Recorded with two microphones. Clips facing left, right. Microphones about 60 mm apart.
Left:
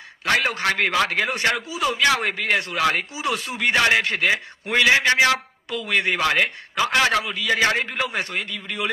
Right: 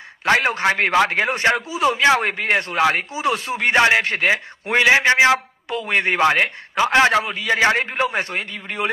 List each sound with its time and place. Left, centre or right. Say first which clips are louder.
0.2 s speech: right 4 dB; right